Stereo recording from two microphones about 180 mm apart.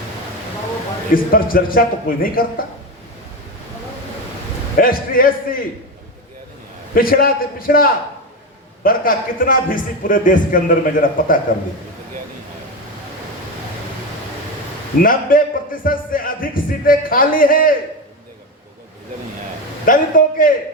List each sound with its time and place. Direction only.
1.1 s speech: 50° left (ahead or behind)
4.8 s a man's voice: 50° left (ahead or behind)
6.9 s speech: 55° left (ahead or behind)
15.0 s speech: 50° left (ahead or behind)
19.8 s speech: 50° left (ahead or behind)